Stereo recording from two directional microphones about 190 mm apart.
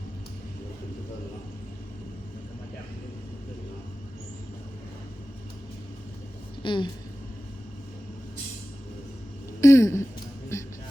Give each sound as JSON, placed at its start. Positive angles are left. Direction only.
{"t": 6.6, "sound": "a woman's voice", "side_deg": 25}
{"t": 9.6, "sound": "a sound", "side_deg": 15}
{"t": 10.5, "sound": "music", "side_deg": 15}